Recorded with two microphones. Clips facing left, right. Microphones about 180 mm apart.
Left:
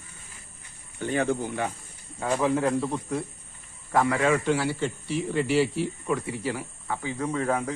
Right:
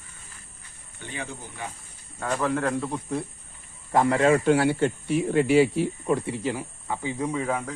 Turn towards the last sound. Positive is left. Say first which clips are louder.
# left 1 dB
turn(degrees=0)  # may be behind; listen again after turning